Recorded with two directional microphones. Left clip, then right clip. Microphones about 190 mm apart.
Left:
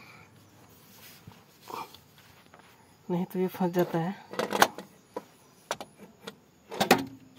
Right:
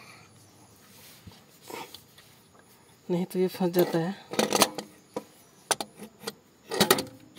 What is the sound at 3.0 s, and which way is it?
Speech, 5° right (ahead or behind).